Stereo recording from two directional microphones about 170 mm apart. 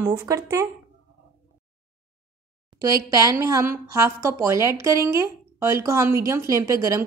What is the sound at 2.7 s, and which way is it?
A woman's voice, 20° right (ahead or behind).